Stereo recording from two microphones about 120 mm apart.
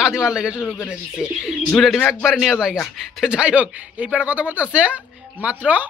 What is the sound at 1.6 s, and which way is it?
Speech, 5° left (ahead or behind).